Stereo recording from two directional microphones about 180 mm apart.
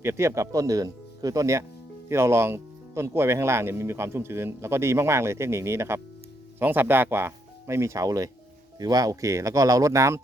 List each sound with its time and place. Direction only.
0.0 s speech: 15° right (ahead or behind)